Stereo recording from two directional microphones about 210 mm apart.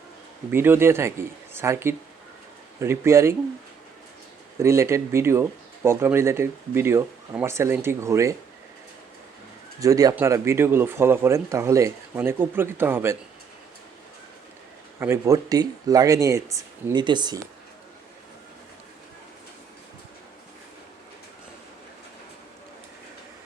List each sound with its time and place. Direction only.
0.5 s speech: 10° right (ahead or behind)
4.6 s speech: 15° right (ahead or behind)
9.8 s speech: 15° right (ahead or behind)
14.9 s speech: 10° right (ahead or behind)